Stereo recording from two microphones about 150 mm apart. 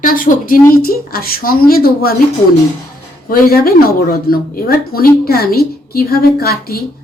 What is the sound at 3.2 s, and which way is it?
A woman's voice, 80° left.